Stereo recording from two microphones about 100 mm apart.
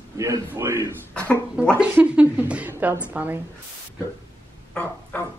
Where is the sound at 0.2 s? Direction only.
30° right (ahead or behind).